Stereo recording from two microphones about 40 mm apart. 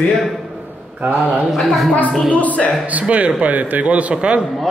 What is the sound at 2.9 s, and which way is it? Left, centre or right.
A man's voice, right.